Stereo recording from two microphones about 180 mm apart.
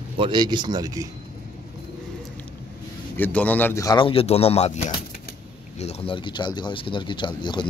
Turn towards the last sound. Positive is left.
turn(degrees=25)  # may be behind; listen again after turning